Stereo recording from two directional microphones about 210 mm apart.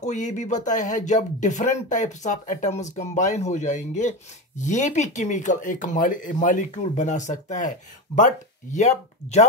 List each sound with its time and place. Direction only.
0.0 s speech: 35° left (ahead or behind)
8.7 s speech: 35° left (ahead or behind)